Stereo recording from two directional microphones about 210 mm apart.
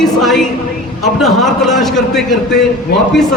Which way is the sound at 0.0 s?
Centre (ahead or behind).